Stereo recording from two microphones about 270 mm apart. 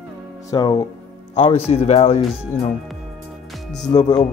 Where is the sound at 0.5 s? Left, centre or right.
Centre.